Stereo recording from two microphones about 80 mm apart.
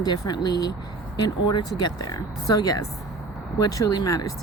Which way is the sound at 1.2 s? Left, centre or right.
Left.